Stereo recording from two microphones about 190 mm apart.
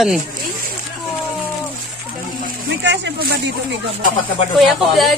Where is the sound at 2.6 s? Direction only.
65° right (ahead or behind).